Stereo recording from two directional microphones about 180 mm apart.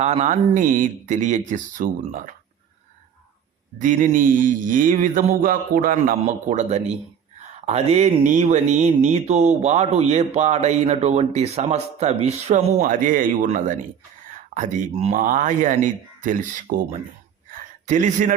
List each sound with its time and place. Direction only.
0.0 s mantra: 40° right (ahead or behind)
3.8 s mantra: 45° right (ahead or behind)
7.6 s a sound: 35° right (ahead or behind)
14.5 s mantra: 45° right (ahead or behind)
17.8 s mantra: 40° right (ahead or behind)